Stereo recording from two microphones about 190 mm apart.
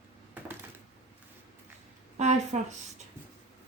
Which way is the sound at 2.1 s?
35° right (ahead or behind).